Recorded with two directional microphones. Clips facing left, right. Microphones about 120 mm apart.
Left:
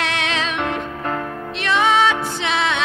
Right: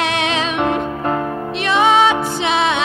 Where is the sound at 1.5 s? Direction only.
15° right (ahead or behind).